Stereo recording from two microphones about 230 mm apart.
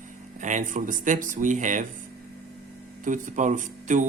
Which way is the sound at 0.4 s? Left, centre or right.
Right.